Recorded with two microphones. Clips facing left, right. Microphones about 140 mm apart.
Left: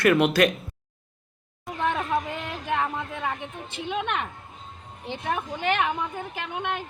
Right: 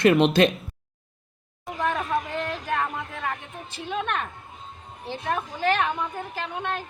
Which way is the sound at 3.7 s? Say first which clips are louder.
Even; 20° left (ahead or behind).